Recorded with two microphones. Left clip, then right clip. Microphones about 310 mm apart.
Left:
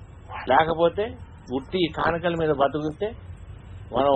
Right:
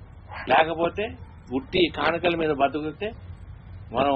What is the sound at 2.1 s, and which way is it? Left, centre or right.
Speech, left.